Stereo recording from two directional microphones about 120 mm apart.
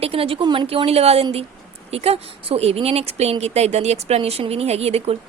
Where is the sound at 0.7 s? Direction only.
55° right (ahead or behind).